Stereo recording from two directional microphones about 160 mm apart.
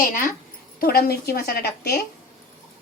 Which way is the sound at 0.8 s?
70° left (ahead or behind).